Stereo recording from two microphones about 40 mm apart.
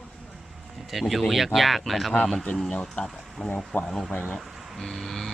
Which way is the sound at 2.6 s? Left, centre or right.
Left.